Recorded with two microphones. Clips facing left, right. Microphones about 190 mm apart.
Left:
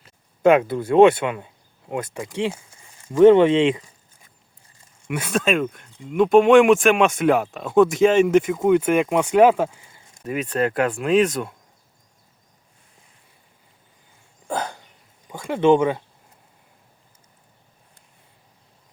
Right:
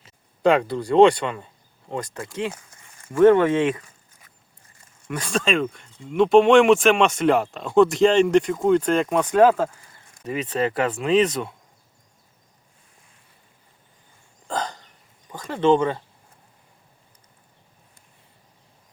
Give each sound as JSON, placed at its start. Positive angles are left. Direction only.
{"t": 0.4, "sound": "speech", "side_deg": 5}
{"t": 5.0, "sound": "speech", "side_deg": 5}
{"t": 10.2, "sound": "speech", "side_deg": 0}
{"t": 14.4, "sound": "hiccup", "side_deg": 10}
{"t": 15.3, "sound": "speech", "side_deg": 10}